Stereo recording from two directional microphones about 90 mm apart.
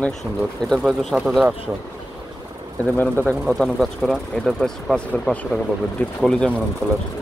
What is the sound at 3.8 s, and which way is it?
Speech, centre (ahead or behind).